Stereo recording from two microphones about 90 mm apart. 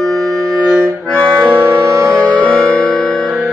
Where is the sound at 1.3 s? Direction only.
25° right (ahead or behind).